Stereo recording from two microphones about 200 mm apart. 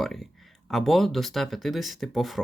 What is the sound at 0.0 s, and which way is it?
Speech, centre (ahead or behind).